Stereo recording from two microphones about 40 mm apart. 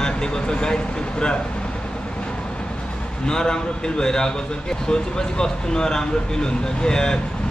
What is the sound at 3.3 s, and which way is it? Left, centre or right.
Speech, centre.